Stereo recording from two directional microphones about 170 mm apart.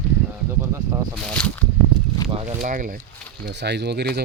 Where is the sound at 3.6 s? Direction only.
80° right.